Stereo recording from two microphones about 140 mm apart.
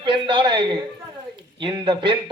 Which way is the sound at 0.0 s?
35° right (ahead or behind).